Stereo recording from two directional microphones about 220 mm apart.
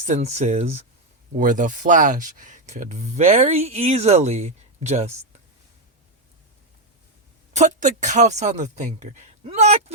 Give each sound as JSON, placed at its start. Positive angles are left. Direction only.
{"t": 0.0, "sound": "speech", "side_deg": -30}
{"t": 7.5, "sound": "speech", "side_deg": -35}